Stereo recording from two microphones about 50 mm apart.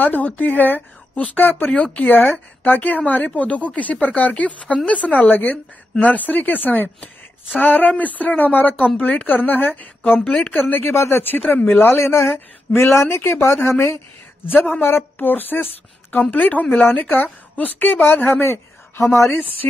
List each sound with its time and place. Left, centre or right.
0.0 s a woman's voice: left
10.8 s speech: left
11.3 s speech: left
14.5 s a woman's voice: left
18.4 s a sound: left
19.6 s speech: left